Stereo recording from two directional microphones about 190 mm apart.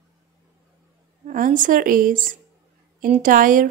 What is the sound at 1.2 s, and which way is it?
A woman's voice, 45° right (ahead or behind).